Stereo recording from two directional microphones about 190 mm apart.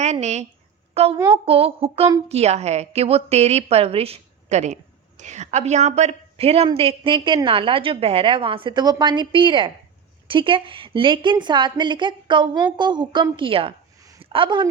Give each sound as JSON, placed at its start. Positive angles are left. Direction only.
{"t": 0.0, "sound": "a woman's voice", "side_deg": -35}